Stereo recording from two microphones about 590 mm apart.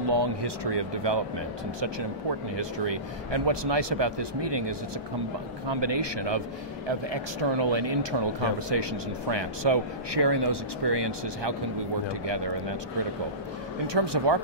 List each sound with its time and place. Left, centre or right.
0.1 s speech: right
2.5 s speech: right
13.9 s speech: right